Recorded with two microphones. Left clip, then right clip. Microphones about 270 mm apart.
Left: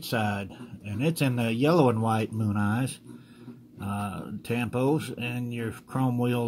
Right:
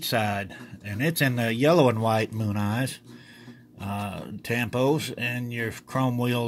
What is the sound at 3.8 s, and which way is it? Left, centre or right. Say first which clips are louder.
Speech: right 1 dB; right.